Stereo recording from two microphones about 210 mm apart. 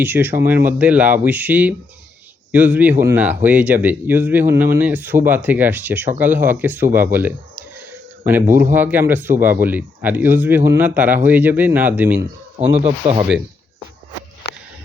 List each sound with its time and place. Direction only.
0.0 s a man's voice: 10° right (ahead or behind)
13.0 s speech: 25° right (ahead or behind)